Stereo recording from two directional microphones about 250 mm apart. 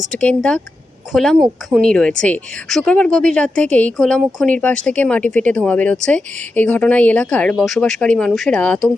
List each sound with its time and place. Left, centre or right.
0.1 s a woman's voice: centre